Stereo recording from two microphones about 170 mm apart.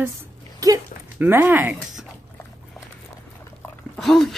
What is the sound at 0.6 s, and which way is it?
Speech, 20° right (ahead or behind).